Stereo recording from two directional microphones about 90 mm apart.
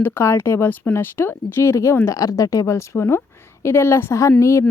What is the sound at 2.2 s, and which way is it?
Speech, 40° left (ahead or behind).